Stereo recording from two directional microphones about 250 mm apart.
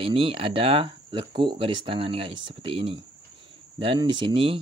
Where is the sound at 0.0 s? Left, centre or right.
Right.